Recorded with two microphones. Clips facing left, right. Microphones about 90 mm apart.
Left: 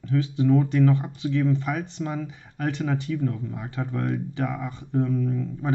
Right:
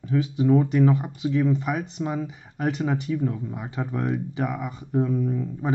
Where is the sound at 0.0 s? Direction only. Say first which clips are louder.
Right 1 dB; 15° right (ahead or behind).